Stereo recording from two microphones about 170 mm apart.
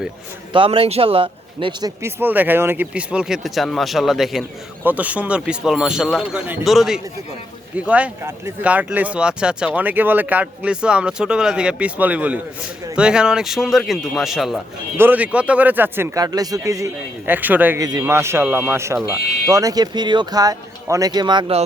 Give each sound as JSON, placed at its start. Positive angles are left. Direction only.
{"t": 0.5, "sound": "speech", "side_deg": -30}
{"t": 2.0, "sound": "speech", "side_deg": -15}
{"t": 17.7, "sound": "speech", "side_deg": -25}
{"t": 19.2, "sound": "speech", "side_deg": 70}
{"t": 19.5, "sound": "speech", "side_deg": -20}